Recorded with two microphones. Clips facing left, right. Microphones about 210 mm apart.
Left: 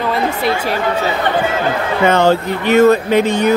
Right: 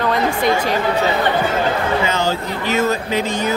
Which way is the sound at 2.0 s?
60° left (ahead or behind).